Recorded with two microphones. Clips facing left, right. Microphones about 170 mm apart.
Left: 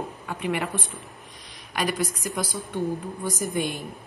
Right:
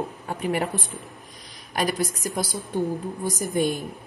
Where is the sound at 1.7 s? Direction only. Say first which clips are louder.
Right 2 dB; 35° right (ahead or behind).